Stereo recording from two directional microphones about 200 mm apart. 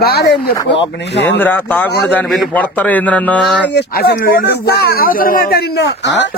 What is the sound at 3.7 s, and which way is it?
Speech, 55° left (ahead or behind).